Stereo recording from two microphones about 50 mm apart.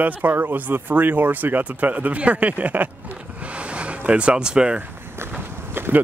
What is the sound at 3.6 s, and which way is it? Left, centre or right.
Vehicle, right.